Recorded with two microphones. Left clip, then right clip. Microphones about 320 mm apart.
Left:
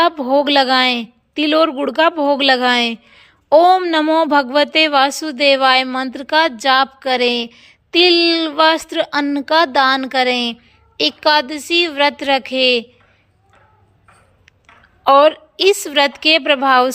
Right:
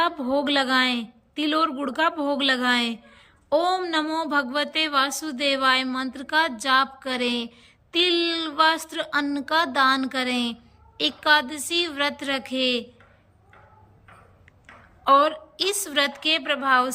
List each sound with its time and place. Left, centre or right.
0.0 s a woman's voice: centre
15.2 s a woman's voice: centre